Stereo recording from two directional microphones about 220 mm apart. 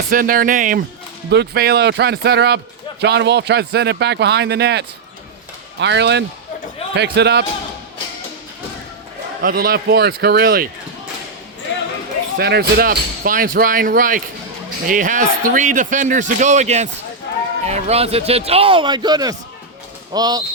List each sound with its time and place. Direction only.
0.1 s speech: 40° right (ahead or behind)
9.4 s speech: 40° right (ahead or behind)
11.7 s basketball bounce: 55° left (ahead or behind)
12.4 s speech: 45° right (ahead or behind); by 20.4 s 15° right (ahead or behind)